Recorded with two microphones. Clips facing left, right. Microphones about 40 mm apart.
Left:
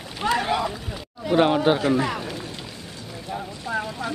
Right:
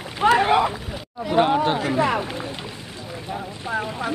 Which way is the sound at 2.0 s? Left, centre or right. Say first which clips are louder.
Right 5 dB; right.